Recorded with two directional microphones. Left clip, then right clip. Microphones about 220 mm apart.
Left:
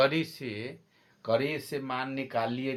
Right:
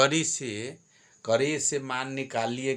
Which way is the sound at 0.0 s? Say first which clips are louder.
Right 3 dB; 35° right (ahead or behind).